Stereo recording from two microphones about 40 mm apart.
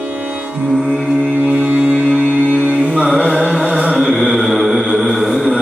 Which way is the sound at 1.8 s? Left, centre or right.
Centre.